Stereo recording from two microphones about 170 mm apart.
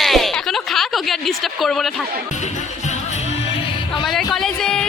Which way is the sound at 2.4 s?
45° left (ahead or behind).